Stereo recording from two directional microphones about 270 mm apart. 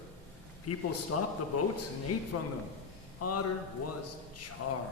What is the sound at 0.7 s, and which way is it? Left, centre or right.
A man's voice, left.